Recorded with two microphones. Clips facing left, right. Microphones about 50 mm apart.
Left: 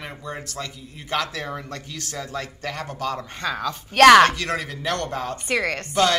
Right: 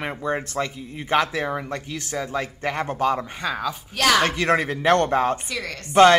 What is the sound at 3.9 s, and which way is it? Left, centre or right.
Speech, left.